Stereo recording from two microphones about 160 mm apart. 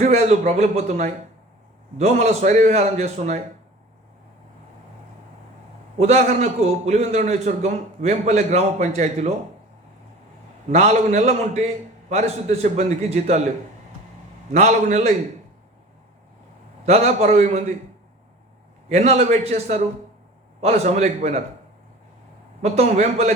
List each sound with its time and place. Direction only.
0.0 s a man's voice: 45° right (ahead or behind)
6.0 s a man's voice: 45° right (ahead or behind)
10.7 s a man's voice: 45° right (ahead or behind)
14.5 s a man's voice: 45° right (ahead or behind)
16.8 s a man's voice: 45° right (ahead or behind)
18.9 s a man's voice: 45° right (ahead or behind)
22.6 s a man's voice: 45° right (ahead or behind)